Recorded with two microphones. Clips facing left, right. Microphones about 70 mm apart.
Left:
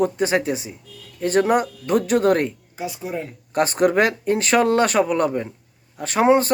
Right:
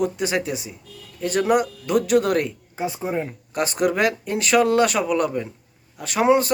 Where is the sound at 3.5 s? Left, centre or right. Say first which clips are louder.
Left 4 dB; left.